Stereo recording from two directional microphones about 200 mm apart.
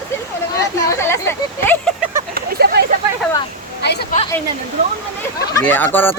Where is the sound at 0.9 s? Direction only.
15° left (ahead or behind).